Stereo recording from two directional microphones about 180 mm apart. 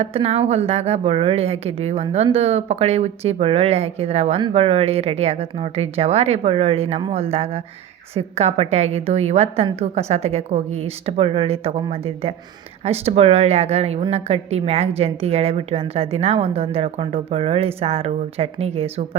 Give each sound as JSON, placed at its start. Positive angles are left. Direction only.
{"t": 0.0, "sound": "a woman's voice", "side_deg": -35}